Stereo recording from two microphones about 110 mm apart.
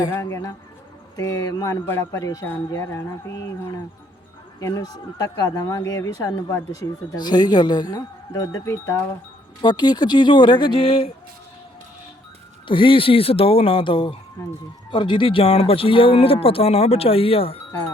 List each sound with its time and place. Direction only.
0.1 s music: 25° left (ahead or behind)
1.1 s speech: 30° left (ahead or behind)
2.8 s music: 25° left (ahead or behind)
4.6 s speech: 35° left (ahead or behind)
9.6 s speech: 40° left (ahead or behind)
12.6 s speech: 50° left (ahead or behind)